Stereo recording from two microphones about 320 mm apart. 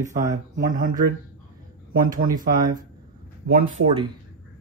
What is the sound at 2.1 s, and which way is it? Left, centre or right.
Speech, right.